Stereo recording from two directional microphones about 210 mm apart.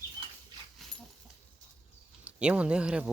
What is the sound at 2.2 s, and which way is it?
Speech, 5° right (ahead or behind).